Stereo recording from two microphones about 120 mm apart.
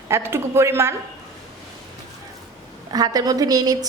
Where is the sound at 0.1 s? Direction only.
20° right (ahead or behind).